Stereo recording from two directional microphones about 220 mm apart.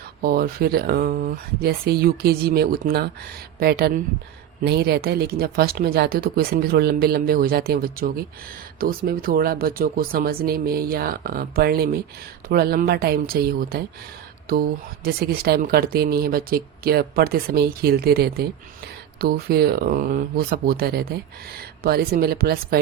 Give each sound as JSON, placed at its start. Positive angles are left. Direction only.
{"t": 0.2, "sound": "speech", "side_deg": -45}
{"t": 15.0, "sound": "speech", "side_deg": -45}